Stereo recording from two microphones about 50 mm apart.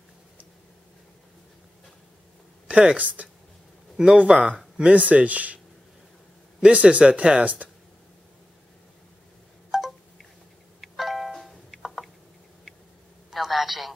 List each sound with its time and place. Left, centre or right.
2.7 s speech: centre
3.0 s speech: right
6.6 s speech: right
9.7 s a sound: centre
10.8 s music: centre
13.3 s telephone: centre